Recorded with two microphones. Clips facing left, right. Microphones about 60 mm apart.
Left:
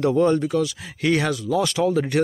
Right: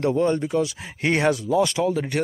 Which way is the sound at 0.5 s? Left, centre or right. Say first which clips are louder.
Left 1 dB; right.